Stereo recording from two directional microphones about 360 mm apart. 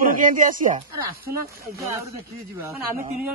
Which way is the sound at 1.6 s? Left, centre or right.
Centre.